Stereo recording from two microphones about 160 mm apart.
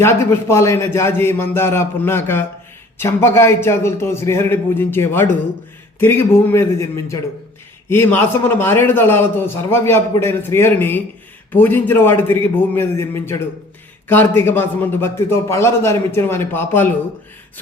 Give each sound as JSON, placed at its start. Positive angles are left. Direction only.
{"t": 0.0, "sound": "a man's voice", "side_deg": 15}